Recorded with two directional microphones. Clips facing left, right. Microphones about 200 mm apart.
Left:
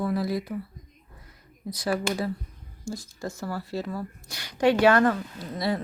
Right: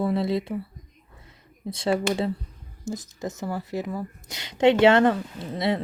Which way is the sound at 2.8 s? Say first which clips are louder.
Right 2 dB; 20° right (ahead or behind).